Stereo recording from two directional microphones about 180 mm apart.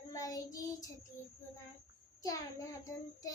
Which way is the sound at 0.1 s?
20° left (ahead or behind).